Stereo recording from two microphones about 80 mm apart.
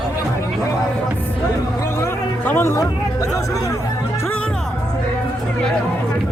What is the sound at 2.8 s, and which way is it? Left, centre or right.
Speech, left.